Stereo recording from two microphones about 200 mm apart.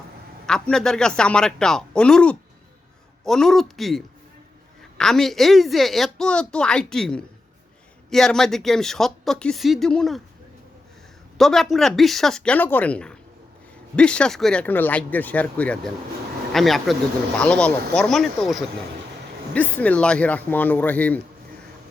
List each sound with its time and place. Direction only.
0.4 s a woman's voice: 5° left (ahead or behind)
11.3 s a woman's voice: centre (ahead or behind)